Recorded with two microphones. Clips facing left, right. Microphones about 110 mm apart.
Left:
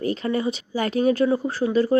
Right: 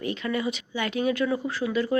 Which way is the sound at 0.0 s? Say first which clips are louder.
Left 4 dB; 35° left (ahead or behind).